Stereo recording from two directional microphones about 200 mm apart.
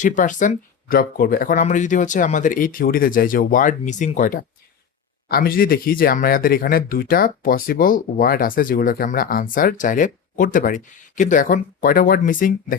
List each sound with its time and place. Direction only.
0.0 s speech: 40° left (ahead or behind)